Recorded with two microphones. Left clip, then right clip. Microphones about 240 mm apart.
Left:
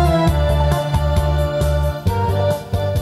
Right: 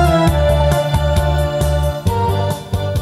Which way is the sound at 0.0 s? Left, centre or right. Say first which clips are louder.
Right 4 dB; right.